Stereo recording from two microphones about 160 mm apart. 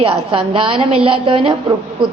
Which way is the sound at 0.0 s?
35° right (ahead or behind).